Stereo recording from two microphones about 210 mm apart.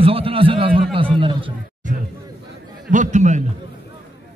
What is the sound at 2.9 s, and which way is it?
Speech, 35° right (ahead or behind).